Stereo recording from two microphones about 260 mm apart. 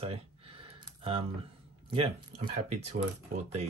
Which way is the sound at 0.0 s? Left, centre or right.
Right.